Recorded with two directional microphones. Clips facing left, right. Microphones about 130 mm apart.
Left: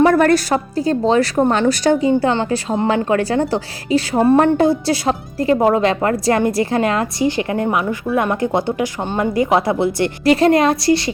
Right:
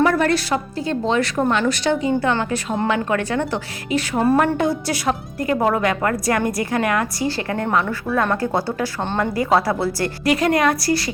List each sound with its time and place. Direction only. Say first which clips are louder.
0.0 s a woman's voice: left 5 dB; 45° left (ahead or behind); by 10.1 s 20° left (ahead or behind)
10.2 s a woman's voice: left 5 dB; 30° left (ahead or behind)